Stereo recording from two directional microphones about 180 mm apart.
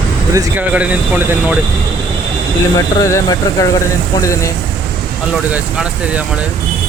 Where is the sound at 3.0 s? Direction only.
15° left (ahead or behind).